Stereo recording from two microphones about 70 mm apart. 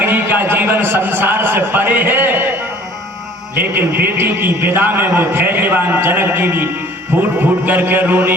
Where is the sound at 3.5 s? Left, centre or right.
Right.